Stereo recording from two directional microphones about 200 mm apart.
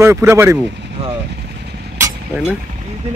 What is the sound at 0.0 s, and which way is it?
Speech, 15° right (ahead or behind).